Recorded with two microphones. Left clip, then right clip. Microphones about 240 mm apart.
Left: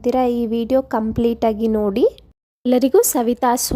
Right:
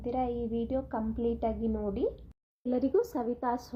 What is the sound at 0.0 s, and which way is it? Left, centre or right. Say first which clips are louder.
A woman's voice: left 14 dB; left.